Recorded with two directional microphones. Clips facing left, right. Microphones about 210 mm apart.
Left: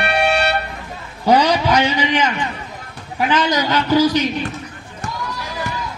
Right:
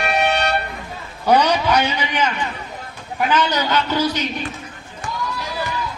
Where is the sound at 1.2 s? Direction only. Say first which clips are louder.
Left 1 dB; 10° left (ahead or behind).